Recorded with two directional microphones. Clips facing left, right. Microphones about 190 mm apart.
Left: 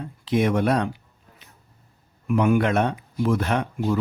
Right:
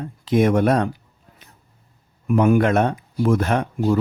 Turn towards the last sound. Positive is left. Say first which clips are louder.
# right 4 dB
turn(degrees=-40)  # may be behind; listen again after turning